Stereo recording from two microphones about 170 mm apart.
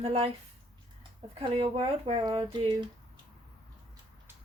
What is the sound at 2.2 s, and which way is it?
Speech, 20° right (ahead or behind).